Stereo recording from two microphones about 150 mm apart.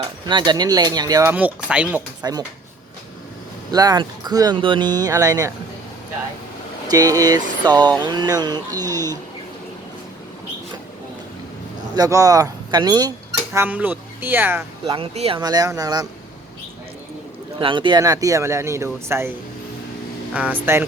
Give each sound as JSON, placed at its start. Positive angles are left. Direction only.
{"t": 0.3, "sound": "speech", "side_deg": -30}
{"t": 1.3, "sound": "speech", "side_deg": -10}
{"t": 2.2, "sound": "speech", "side_deg": -25}
{"t": 3.7, "sound": "speech", "side_deg": -25}
{"t": 6.9, "sound": "speech", "side_deg": -25}
{"t": 11.9, "sound": "speech", "side_deg": -25}
{"t": 14.8, "sound": "speech", "side_deg": -35}
{"t": 15.4, "sound": "speech", "side_deg": -25}
{"t": 17.6, "sound": "speech", "side_deg": -35}
{"t": 20.3, "sound": "speech", "side_deg": -10}